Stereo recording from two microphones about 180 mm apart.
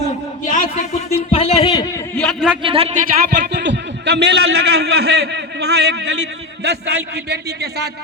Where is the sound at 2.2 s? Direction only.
5° right (ahead or behind).